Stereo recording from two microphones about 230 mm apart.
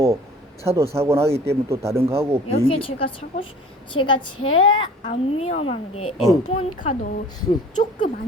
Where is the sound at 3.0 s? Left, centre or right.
Left.